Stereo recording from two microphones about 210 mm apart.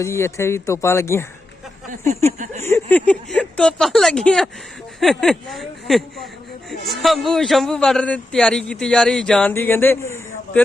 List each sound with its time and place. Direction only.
0.0 s speech: 15° left (ahead or behind)
2.4 s a sound: 35° right (ahead or behind)
2.6 s a man's voice: 10° left (ahead or behind)